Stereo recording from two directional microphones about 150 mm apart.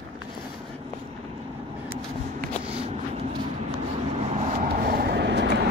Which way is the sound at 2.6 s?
40° right (ahead or behind).